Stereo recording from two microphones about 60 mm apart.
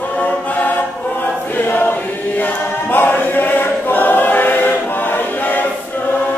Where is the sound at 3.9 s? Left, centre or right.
Left.